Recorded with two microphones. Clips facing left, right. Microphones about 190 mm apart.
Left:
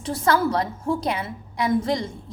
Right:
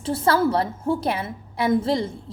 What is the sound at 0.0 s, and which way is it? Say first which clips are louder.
A woman's voice: right 1 dB; 30° right (ahead or behind).